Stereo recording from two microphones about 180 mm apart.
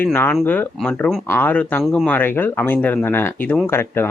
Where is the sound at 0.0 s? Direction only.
10° left (ahead or behind).